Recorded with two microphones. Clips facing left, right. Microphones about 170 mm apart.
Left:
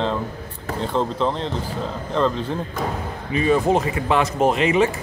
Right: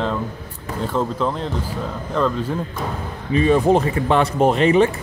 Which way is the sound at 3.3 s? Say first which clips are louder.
Right 3 dB; 35° right (ahead or behind).